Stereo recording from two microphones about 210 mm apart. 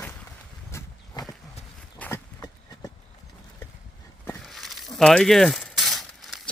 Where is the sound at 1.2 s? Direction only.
20° left (ahead or behind).